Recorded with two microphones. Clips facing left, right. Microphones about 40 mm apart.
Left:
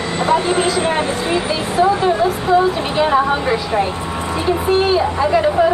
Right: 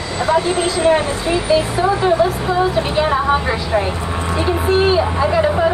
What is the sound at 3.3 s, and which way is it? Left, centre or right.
Speech, centre.